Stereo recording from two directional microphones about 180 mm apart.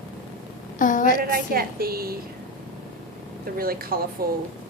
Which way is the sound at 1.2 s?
55° right (ahead or behind).